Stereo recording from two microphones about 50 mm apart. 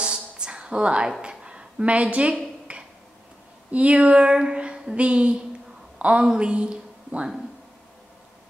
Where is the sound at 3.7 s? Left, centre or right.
Right.